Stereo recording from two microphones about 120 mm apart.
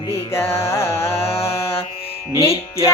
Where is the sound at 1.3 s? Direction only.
55° left (ahead or behind).